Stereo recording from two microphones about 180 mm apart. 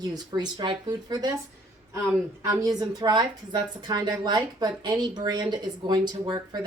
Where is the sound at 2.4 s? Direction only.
20° right (ahead or behind).